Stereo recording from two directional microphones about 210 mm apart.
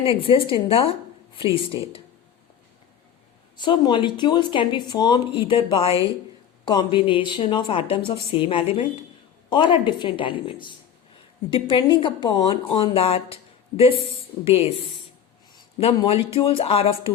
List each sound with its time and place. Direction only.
0.2 s speech: 25° left (ahead or behind)
3.6 s speech: 20° left (ahead or behind)